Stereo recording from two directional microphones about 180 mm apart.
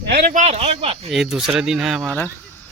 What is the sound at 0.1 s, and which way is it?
Speech, 50° right (ahead or behind).